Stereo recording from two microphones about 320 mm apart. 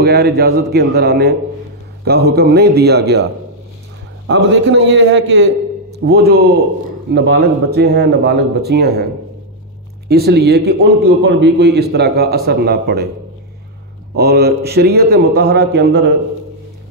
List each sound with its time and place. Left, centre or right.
0.0 s a man's voice: right
4.3 s a man's voice: right
10.0 s a man's voice: right
14.1 s speech: right